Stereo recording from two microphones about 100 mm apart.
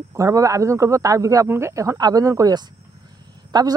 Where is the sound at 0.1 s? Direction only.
35° right (ahead or behind).